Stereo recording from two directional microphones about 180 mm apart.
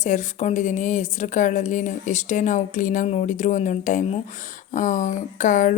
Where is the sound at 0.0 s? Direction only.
40° left (ahead or behind).